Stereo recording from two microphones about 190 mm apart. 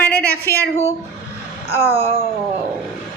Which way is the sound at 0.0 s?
5° left (ahead or behind).